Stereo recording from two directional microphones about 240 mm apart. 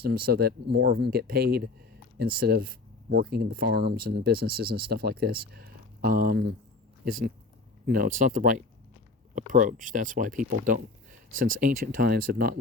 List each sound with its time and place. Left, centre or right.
0.0 s speech: right
7.9 s speech: right
11.3 s speech: right
12.0 s speech: right